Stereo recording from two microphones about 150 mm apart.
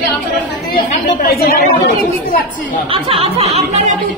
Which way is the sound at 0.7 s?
90° left.